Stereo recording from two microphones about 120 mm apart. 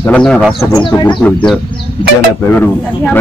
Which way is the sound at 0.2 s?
Centre (ahead or behind).